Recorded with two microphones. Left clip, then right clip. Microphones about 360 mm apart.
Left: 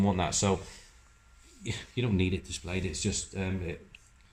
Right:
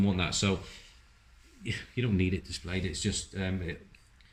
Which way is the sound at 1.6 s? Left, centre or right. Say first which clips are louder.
Even; centre.